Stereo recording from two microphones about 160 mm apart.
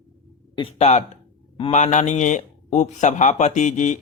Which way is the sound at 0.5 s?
35° left (ahead or behind).